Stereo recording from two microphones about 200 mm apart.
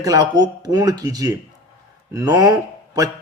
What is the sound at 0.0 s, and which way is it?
A man's voice, 20° right (ahead or behind).